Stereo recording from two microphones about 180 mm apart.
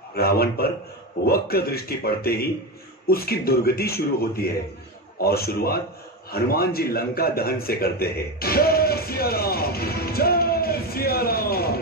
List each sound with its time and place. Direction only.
0.1 s a man's voice: 60° left (ahead or behind)